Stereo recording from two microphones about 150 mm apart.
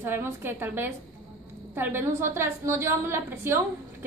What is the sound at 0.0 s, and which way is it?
A woman's voice, 15° right (ahead or behind).